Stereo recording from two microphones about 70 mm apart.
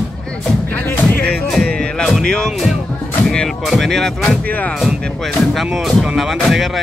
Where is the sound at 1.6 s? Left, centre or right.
Centre.